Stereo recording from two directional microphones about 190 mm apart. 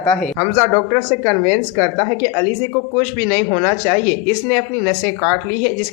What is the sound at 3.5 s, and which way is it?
Speech, 15° left (ahead or behind).